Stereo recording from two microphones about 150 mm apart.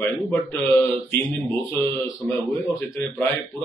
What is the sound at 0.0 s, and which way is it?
Speech, 15° left (ahead or behind).